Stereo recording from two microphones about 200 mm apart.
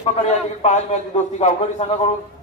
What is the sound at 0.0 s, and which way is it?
Speech, 30° left (ahead or behind).